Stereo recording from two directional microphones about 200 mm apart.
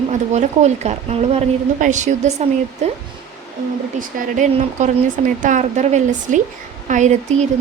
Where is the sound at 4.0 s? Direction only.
40° right (ahead or behind).